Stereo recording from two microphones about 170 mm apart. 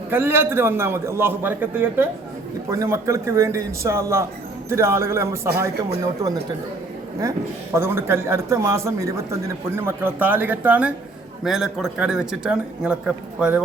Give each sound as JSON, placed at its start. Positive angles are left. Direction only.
{"t": 0.1, "sound": "speech", "side_deg": -15}